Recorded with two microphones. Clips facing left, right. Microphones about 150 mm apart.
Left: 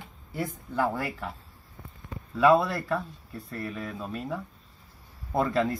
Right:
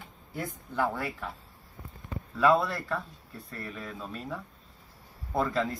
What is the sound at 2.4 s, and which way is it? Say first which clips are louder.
A man's voice: left 3 dB; 5° left (ahead or behind).